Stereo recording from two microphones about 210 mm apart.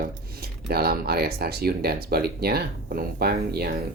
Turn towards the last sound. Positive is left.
turn(degrees=-45)  # may be behind; listen again after turning